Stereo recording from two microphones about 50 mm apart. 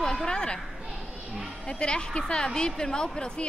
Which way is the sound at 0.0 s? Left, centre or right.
Centre.